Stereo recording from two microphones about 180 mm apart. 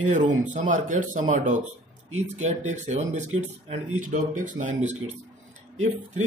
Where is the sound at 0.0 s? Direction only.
45° right (ahead or behind).